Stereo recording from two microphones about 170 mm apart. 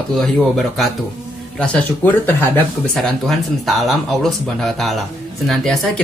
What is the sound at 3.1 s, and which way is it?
Speech, centre (ahead or behind).